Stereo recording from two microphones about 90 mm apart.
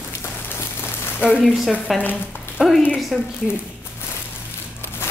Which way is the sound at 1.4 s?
Centre (ahead or behind).